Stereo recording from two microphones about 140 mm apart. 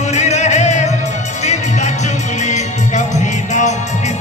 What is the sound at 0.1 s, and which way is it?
Music, 55° left (ahead or behind).